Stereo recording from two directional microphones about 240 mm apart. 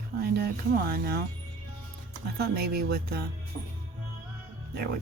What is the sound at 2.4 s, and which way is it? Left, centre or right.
Speech, right.